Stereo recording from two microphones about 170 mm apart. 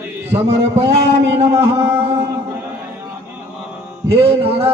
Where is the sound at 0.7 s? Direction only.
35° right (ahead or behind).